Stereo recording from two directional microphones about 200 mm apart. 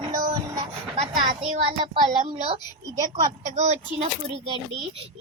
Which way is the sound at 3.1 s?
30° right (ahead or behind).